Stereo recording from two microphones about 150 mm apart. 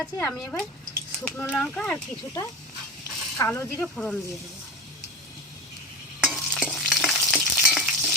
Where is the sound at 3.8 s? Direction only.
10° left (ahead or behind).